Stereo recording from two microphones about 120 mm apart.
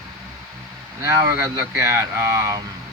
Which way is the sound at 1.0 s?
25° right (ahead or behind).